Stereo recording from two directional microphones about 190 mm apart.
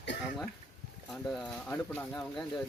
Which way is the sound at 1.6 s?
10° left (ahead or behind).